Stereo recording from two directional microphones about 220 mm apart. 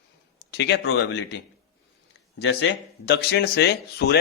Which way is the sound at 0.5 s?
50° left (ahead or behind).